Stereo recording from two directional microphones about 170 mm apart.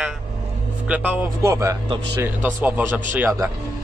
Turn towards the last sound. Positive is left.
turn(degrees=-15)  # may be behind; listen again after turning